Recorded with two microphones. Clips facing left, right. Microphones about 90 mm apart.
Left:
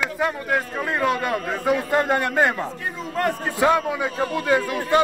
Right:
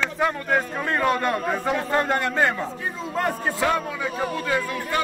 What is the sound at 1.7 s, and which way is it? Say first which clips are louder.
Speech: left 4 dB; 15° left (ahead or behind).